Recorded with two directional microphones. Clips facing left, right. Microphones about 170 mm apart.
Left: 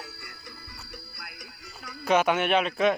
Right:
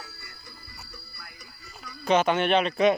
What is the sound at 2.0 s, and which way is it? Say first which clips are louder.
Speech: right 1 dB; 5° left (ahead or behind).